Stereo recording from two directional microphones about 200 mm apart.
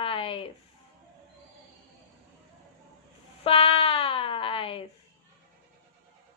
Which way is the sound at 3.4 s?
30° left (ahead or behind).